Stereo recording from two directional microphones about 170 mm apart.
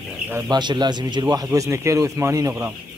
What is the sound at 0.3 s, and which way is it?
Speech, 20° right (ahead or behind).